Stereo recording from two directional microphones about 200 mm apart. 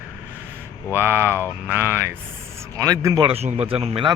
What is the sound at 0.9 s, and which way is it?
Speech, 10° right (ahead or behind).